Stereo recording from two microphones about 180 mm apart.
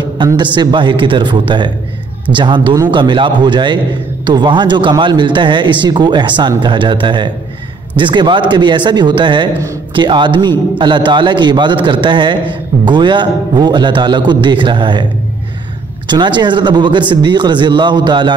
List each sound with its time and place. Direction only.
0.2 s a man's voice: 25° right (ahead or behind)
16.1 s a man's voice: 25° right (ahead or behind)